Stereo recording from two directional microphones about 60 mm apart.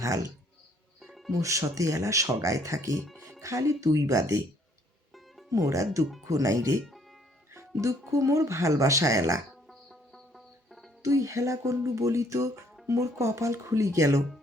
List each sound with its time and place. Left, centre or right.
0.0 s speech: right
1.0 s music: centre
1.3 s speech: right
5.5 s speech: right
9.6 s music: centre
11.0 s speech: right